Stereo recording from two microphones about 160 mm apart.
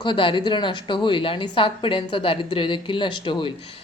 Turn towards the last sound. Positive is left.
turn(degrees=30)  # may be behind; listen again after turning